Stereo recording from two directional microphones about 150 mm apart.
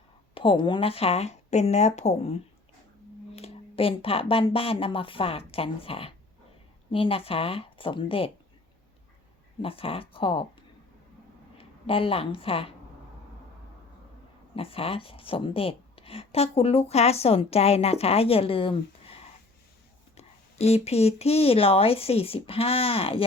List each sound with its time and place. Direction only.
0.3 s speech: 35° left (ahead or behind)
9.6 s speech: 40° left (ahead or behind)
11.5 s a woman's voice: 40° left (ahead or behind)
14.5 s speech: 40° left (ahead or behind)
20.1 s speech: 45° left (ahead or behind)